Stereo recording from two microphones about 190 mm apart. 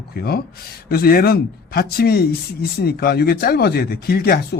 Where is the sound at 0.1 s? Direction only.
55° left (ahead or behind).